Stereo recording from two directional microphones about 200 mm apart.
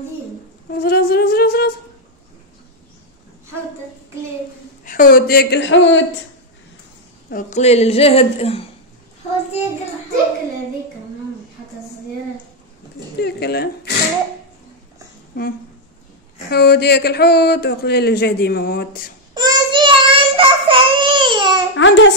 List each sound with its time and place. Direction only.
0.7 s a sound: 50° left (ahead or behind)
4.8 s speech: 45° left (ahead or behind); by 6.0 s 65° left (ahead or behind)
7.2 s a woman's voice: 40° left (ahead or behind)
13.2 s a sound: 55° left (ahead or behind)
15.3 s speech: 50° left (ahead or behind)
19.3 s child singing: 20° right (ahead or behind)
21.7 s a child's voice: 65° left (ahead or behind)